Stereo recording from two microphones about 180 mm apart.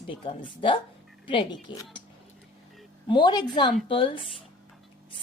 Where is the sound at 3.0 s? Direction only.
25° left (ahead or behind).